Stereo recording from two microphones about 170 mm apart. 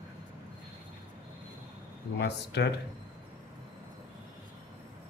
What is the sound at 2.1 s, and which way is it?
Speech, 85° left.